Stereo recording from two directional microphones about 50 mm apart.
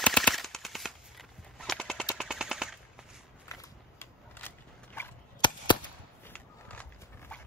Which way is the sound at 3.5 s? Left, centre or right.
Left.